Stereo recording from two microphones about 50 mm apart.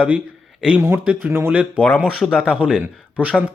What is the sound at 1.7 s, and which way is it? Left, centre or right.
Speech, left.